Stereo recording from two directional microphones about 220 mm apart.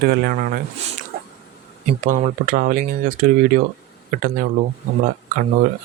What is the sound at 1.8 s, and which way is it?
Speech, 35° right (ahead or behind).